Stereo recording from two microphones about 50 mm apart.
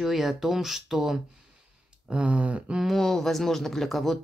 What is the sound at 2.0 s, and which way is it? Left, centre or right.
Speech, right.